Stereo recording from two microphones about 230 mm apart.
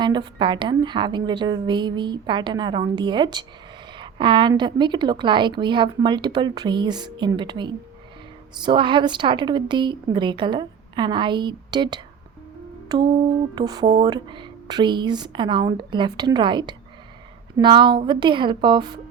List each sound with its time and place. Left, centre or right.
0.0 s a woman's voice: centre
12.9 s music: centre
13.6 s a woman's voice: centre